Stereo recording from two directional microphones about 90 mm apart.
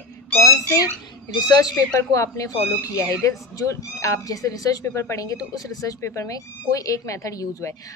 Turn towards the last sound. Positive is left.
turn(degrees=35)  # may be behind; listen again after turning